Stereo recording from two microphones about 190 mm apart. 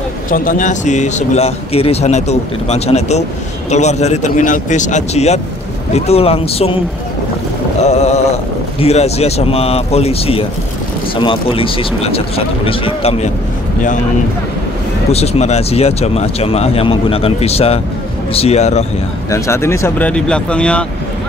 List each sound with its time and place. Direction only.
0.3 s speech: 45° left (ahead or behind)
7.8 s speech: 35° left (ahead or behind)
15.0 s speech: 35° left (ahead or behind)
19.3 s speech: 15° left (ahead or behind)